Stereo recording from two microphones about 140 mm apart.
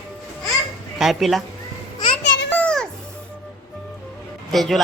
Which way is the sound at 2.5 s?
10° left (ahead or behind).